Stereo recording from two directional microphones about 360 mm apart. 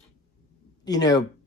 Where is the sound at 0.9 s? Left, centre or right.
Centre.